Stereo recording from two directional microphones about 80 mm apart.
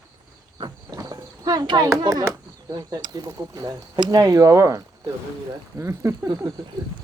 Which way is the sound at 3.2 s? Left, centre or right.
Right.